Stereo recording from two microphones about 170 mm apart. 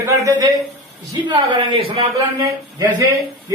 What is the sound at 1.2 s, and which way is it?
A man's voice, 30° right (ahead or behind).